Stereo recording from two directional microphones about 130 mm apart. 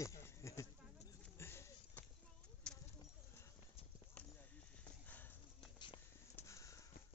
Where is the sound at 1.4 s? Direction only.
20° left (ahead or behind).